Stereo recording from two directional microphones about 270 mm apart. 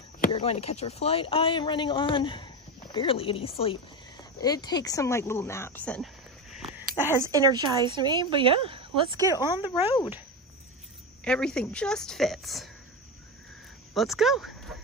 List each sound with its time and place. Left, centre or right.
0.2 s speech: left
7.0 s speech: centre
9.3 s speech: centre
9.9 s speech: centre
11.2 s a woman's voice: centre
13.9 s a woman's voice: centre